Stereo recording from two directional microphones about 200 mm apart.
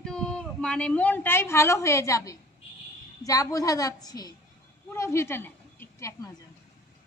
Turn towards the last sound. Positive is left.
turn(degrees=15)  # may be behind; listen again after turning